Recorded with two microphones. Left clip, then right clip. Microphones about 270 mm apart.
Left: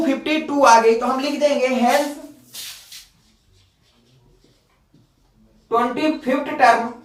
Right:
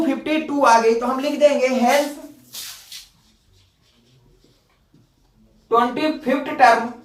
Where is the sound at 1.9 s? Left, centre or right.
Centre.